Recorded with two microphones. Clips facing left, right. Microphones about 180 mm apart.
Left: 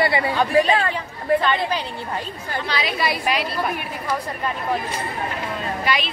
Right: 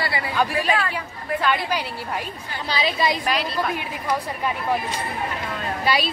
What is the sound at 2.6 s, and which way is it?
Speech, 25° right (ahead or behind).